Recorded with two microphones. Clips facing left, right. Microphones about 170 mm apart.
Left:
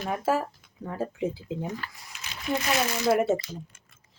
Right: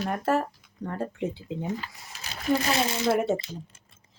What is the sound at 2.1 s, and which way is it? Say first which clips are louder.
Speech: right 4 dB; 40° right (ahead or behind).